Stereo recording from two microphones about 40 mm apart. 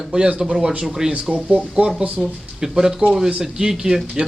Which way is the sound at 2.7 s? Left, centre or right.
Centre.